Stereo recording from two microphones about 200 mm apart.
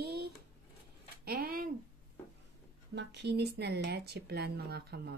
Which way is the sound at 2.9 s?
60° right (ahead or behind).